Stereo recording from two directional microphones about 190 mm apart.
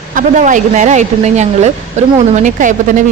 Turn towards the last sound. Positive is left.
turn(degrees=-40)  # may be behind; listen again after turning